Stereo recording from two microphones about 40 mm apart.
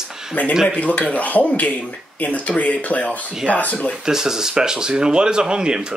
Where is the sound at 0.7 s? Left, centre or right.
Left.